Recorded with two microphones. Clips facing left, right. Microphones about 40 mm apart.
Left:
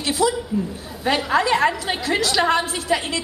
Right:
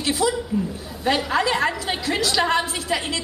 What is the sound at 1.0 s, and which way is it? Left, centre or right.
A woman's voice, centre.